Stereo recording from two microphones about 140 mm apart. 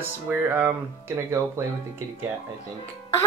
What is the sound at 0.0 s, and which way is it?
Speech, 15° right (ahead or behind).